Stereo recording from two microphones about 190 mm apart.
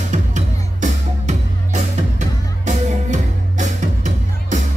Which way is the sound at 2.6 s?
40° right (ahead or behind).